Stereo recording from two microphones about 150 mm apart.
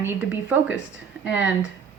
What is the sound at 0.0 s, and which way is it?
Speech, 15° right (ahead or behind).